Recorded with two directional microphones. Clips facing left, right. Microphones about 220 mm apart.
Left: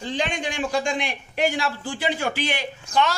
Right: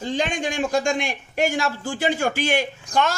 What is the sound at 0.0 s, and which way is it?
A man's voice, 45° right (ahead or behind).